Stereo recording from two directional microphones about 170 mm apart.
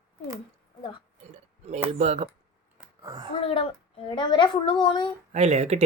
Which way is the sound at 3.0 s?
20° right (ahead or behind).